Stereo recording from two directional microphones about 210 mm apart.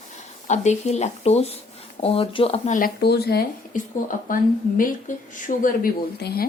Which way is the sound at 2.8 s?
45° left (ahead or behind).